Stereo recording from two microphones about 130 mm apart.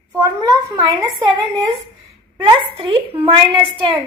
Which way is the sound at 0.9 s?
30° right (ahead or behind).